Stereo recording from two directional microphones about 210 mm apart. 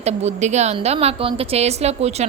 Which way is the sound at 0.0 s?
30° right (ahead or behind).